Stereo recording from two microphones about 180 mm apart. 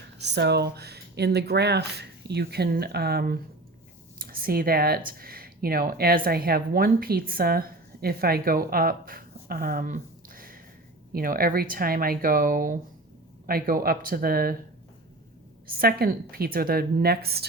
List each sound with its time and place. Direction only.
0.2 s speech: 70° right (ahead or behind)
15.6 s speech: 55° right (ahead or behind)